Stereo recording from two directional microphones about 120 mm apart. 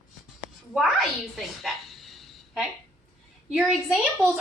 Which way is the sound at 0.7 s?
Centre (ahead or behind).